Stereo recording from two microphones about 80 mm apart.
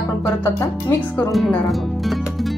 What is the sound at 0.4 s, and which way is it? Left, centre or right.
Speech, left.